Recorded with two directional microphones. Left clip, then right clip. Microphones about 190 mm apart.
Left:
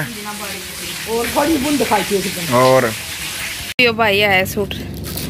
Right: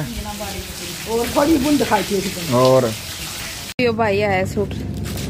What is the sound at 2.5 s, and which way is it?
Speech, 5° left (ahead or behind).